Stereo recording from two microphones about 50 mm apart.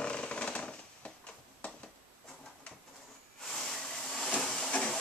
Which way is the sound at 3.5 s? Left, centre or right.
Centre.